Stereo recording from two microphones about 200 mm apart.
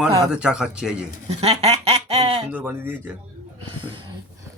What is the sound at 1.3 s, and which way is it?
Speech, 30° right (ahead or behind).